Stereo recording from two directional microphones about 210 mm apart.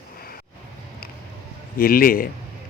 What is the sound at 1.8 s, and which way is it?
Speech, 45° left (ahead or behind).